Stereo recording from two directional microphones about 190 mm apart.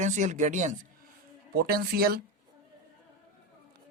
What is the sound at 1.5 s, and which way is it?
Speech, 55° right (ahead or behind).